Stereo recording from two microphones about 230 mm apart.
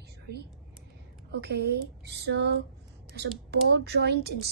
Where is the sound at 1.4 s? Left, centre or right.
Right.